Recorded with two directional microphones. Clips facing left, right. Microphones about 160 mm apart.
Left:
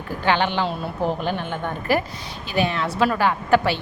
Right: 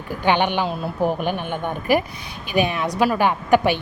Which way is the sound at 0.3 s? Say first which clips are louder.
Right 2 dB; 15° right (ahead or behind).